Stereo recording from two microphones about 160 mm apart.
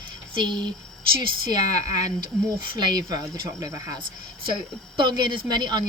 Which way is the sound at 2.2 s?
30° right (ahead or behind).